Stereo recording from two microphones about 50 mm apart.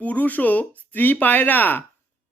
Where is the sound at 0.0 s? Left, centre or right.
Left.